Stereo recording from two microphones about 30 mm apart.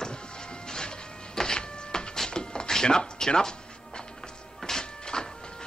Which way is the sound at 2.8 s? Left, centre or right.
Left.